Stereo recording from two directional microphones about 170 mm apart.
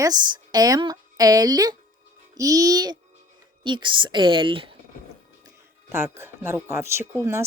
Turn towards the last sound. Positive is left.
turn(degrees=-15)  # may be behind; listen again after turning